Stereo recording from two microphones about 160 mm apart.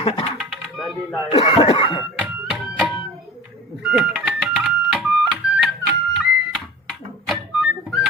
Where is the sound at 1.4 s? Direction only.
30° left (ahead or behind).